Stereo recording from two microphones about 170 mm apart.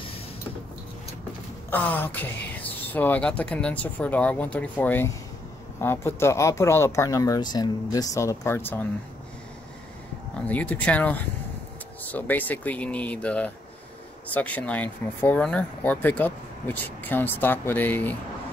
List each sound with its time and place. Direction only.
1.7 s speech: 10° left (ahead or behind)
10.4 s speech: 10° left (ahead or behind)